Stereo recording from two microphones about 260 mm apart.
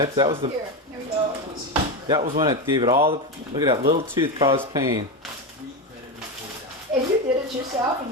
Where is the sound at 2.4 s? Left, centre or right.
Centre.